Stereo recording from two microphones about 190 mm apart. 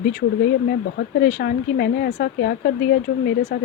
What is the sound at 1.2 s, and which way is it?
Speech, 55° left (ahead or behind).